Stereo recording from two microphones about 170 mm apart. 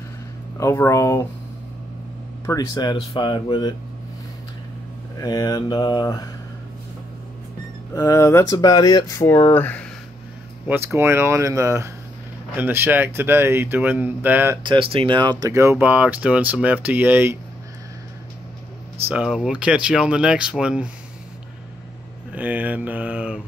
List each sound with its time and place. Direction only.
0.6 s speech: 15° left (ahead or behind)
2.4 s speech: 25° left (ahead or behind)
5.2 s speech: 20° left (ahead or behind)
7.9 s speech: 20° left (ahead or behind)
10.7 s speech: 15° right (ahead or behind)
14.6 s speech: 30° right (ahead or behind); by 17.4 s 10° right (ahead or behind)
19.0 s speech: 5° right (ahead or behind)
22.3 s speech: 10° right (ahead or behind)